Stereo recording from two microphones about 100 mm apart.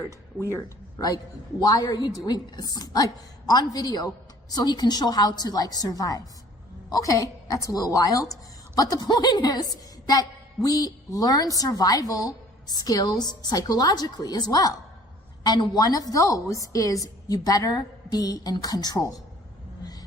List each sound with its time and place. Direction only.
0.0 s a woman's voice: 30° left (ahead or behind)